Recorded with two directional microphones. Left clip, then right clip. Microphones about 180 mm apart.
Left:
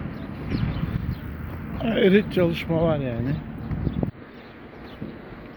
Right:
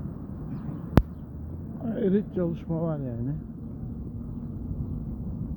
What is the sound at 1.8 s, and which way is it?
Speech, 15° left (ahead or behind).